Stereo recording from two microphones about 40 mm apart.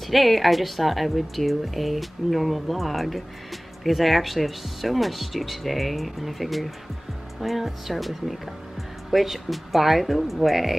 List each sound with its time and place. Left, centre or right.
0.0 s a woman's voice: centre